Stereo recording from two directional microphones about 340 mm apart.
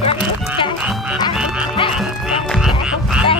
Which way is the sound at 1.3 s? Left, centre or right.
Centre.